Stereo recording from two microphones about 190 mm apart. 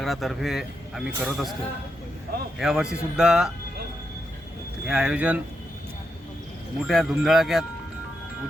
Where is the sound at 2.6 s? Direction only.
5° right (ahead or behind).